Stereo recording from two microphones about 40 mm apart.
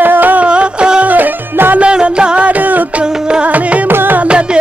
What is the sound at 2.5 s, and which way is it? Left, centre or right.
Music, right.